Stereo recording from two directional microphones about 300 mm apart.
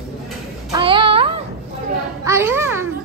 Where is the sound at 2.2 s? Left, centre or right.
Centre.